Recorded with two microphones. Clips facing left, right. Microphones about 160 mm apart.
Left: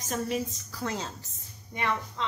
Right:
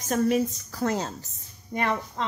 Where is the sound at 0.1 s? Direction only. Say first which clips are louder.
Right 8 dB; 50° right (ahead or behind).